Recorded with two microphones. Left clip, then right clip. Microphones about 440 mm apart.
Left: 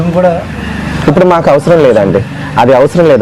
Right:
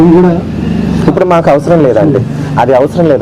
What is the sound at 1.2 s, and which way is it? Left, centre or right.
A man's voice, left.